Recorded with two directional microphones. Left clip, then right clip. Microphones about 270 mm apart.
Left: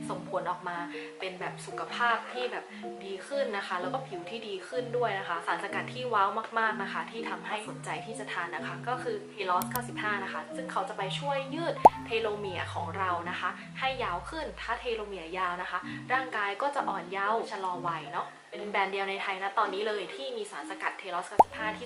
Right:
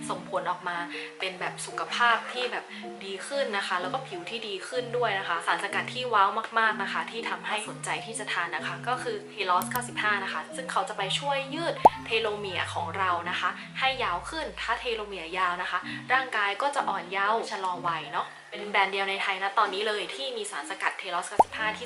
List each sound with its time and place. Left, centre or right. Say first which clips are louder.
0.4 s a woman's voice: right 3 dB; centre